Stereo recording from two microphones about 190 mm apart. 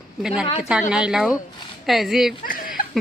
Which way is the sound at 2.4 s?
50° left (ahead or behind).